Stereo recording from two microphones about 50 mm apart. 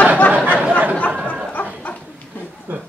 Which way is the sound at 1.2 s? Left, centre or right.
Left.